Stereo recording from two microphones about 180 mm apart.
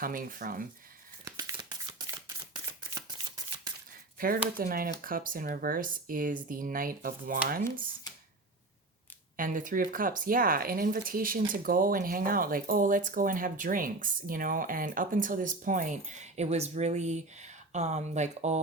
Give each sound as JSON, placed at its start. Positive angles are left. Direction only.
{"t": 0.0, "sound": "speech", "side_deg": -50}
{"t": 1.2, "sound": "a sound", "side_deg": -20}
{"t": 4.5, "sound": "speech", "side_deg": -55}
{"t": 9.4, "sound": "speech", "side_deg": -50}